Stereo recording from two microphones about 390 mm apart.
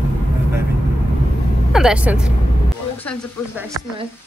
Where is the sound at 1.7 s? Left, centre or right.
Centre.